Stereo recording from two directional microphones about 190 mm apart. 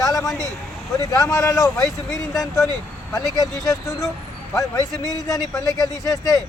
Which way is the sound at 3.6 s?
15° left (ahead or behind).